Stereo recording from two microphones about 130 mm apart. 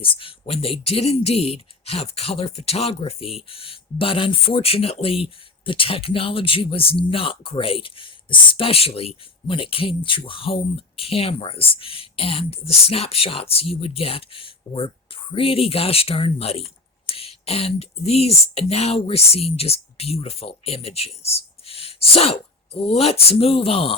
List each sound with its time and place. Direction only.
0.0 s speech: 45° left (ahead or behind)